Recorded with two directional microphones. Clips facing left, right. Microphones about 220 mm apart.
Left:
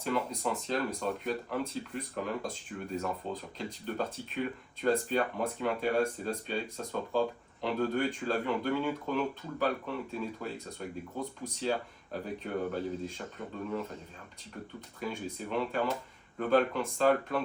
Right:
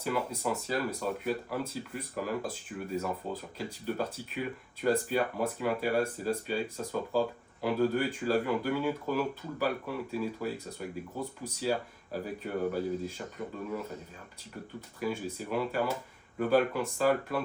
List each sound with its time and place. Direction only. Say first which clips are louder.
0.0 s speech: even; 5° right (ahead or behind)
15.0 s speech: right 3 dB; 5° right (ahead or behind)